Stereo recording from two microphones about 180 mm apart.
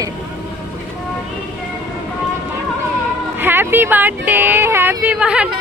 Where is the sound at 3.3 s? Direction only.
10° right (ahead or behind).